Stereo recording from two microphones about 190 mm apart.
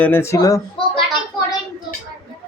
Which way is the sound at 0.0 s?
10° left (ahead or behind).